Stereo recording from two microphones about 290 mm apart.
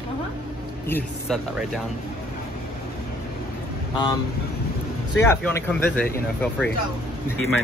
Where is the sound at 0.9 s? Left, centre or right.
Centre.